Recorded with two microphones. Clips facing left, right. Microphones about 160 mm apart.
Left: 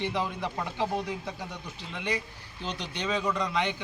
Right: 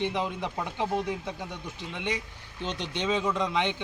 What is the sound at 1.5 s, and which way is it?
A man's voice, 20° right (ahead or behind).